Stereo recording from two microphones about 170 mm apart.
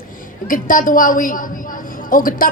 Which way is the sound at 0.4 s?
50° left (ahead or behind).